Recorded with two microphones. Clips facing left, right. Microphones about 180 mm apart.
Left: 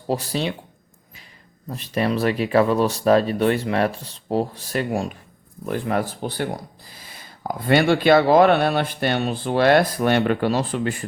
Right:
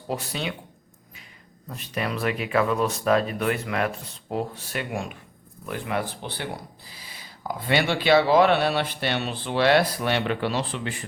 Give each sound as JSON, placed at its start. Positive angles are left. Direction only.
{"t": 0.1, "sound": "speech", "side_deg": 35}
{"t": 1.7, "sound": "speech", "side_deg": 35}